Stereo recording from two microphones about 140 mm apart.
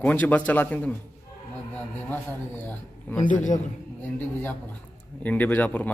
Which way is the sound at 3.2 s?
65° left (ahead or behind).